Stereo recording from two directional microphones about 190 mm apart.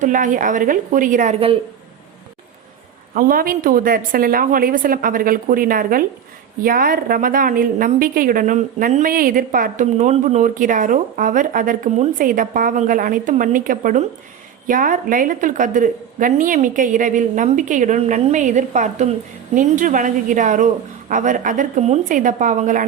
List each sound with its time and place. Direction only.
0.0 s a woman's voice: 45° right (ahead or behind)
3.2 s a woman's voice: 50° right (ahead or behind)